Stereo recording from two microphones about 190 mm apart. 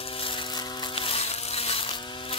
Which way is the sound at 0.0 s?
30° left (ahead or behind).